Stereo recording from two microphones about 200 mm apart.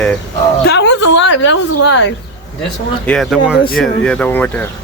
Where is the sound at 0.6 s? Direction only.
60° left (ahead or behind).